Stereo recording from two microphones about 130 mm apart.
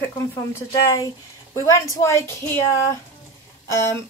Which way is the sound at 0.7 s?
25° left (ahead or behind).